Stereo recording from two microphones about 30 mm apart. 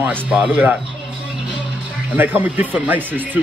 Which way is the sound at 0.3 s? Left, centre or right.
Right.